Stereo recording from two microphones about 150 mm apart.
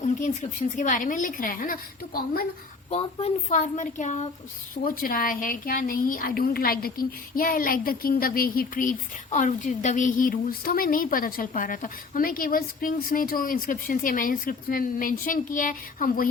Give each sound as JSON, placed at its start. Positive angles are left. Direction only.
{"t": 0.8, "sound": "a woman's voice", "side_deg": 60}
{"t": 2.9, "sound": "a woman's voice", "side_deg": 40}
{"t": 3.5, "sound": "a woman's voice", "side_deg": 55}
{"t": 4.7, "sound": "a woman's voice", "side_deg": 70}